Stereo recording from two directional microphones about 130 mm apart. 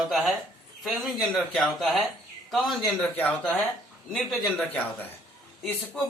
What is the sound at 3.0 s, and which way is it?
A man's voice, 10° left (ahead or behind).